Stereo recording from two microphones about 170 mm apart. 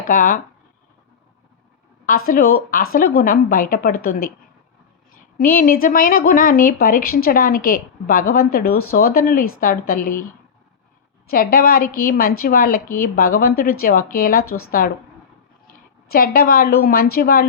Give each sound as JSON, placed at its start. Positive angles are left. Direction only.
{"t": 0.1, "sound": "speech", "side_deg": 55}
{"t": 2.0, "sound": "a woman's voice", "side_deg": 55}
{"t": 5.4, "sound": "a woman's voice", "side_deg": 55}
{"t": 11.3, "sound": "a woman's voice", "side_deg": 60}